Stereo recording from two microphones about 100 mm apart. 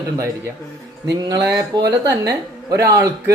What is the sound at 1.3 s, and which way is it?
Speech, 40° right (ahead or behind).